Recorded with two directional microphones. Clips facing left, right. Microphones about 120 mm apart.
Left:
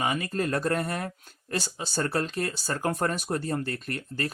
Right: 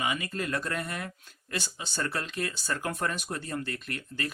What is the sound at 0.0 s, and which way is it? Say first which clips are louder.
Speech: left 4 dB; 40° left (ahead or behind).